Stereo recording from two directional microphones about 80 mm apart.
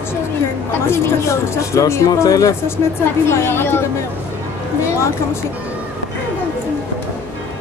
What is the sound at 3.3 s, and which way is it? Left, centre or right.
Speech, left.